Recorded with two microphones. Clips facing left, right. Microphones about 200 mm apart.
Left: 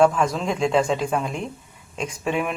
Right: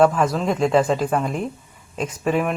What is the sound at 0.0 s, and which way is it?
Speech, 5° right (ahead or behind).